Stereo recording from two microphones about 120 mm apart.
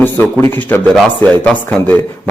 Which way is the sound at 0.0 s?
15° left (ahead or behind).